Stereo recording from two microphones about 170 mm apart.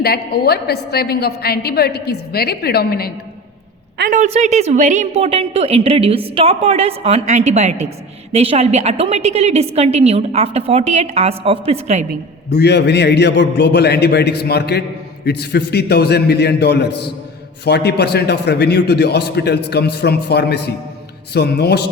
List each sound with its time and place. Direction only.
0.0 s a man's voice: 65° left (ahead or behind)
4.1 s a woman's voice: 45° right (ahead or behind)
12.5 s a man's voice: 75° left (ahead or behind)